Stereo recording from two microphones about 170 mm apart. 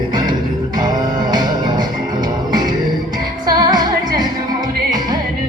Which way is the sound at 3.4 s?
25° right (ahead or behind).